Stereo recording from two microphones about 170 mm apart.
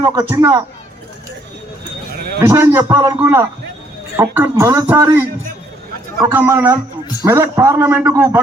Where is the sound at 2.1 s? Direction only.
65° right (ahead or behind).